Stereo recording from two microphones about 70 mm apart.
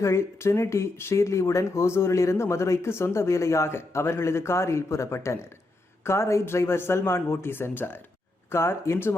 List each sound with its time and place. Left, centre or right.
0.0 s speech: left